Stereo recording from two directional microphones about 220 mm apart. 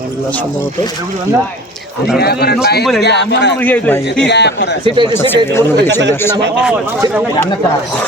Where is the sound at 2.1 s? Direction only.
45° left (ahead or behind).